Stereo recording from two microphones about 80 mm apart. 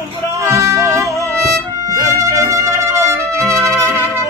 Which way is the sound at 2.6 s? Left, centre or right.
Right.